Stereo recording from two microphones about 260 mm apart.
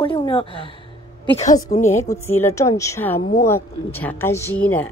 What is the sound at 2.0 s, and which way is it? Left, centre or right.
Speech, centre.